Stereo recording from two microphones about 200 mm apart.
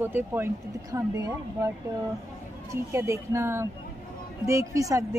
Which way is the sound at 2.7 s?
15° right (ahead or behind).